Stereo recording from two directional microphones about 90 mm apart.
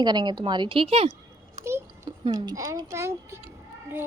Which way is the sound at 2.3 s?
50° right (ahead or behind).